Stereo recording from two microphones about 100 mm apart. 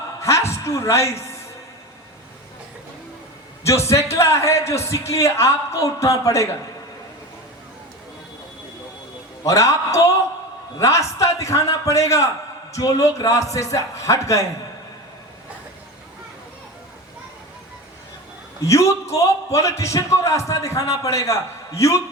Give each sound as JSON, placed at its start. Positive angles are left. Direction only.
{"t": 0.2, "sound": "a man's voice", "side_deg": 30}
{"t": 3.6, "sound": "a man's voice", "side_deg": 30}
{"t": 9.4, "sound": "a man's voice", "side_deg": 30}
{"t": 18.6, "sound": "a man's voice", "side_deg": 30}